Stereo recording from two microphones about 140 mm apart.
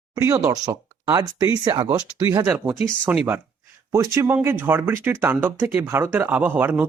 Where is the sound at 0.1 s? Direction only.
20° right (ahead or behind).